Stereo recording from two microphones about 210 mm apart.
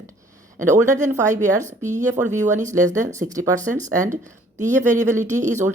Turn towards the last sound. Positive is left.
turn(degrees=-35)  # may be behind; listen again after turning